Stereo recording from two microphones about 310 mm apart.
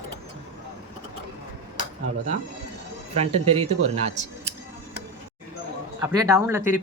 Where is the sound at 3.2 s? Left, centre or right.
Centre.